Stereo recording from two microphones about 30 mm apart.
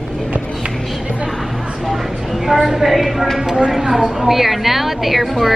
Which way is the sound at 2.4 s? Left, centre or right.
Centre.